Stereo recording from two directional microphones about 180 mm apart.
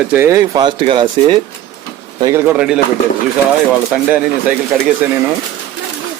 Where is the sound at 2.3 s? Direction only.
10° right (ahead or behind).